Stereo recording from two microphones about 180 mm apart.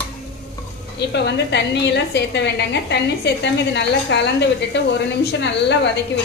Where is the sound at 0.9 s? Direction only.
70° left (ahead or behind).